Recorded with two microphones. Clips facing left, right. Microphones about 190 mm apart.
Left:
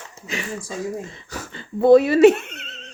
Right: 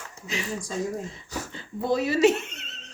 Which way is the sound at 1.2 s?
65° left (ahead or behind).